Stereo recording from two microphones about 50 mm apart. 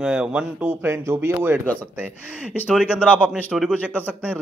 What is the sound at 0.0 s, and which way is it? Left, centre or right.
Speech, centre.